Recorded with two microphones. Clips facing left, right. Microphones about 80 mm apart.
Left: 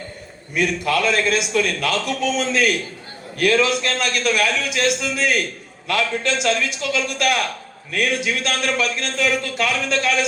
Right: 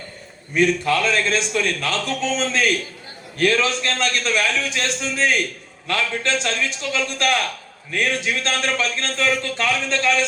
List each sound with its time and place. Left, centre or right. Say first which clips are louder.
0.5 s a man's voice: right 2 dB; right